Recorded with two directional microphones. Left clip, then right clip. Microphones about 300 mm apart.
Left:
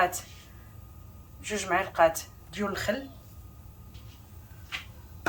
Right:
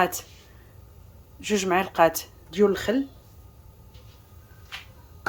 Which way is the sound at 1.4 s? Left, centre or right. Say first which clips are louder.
Right 5 dB; right.